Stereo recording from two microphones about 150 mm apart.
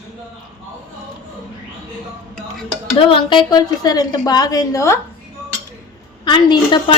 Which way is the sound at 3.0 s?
35° left (ahead or behind).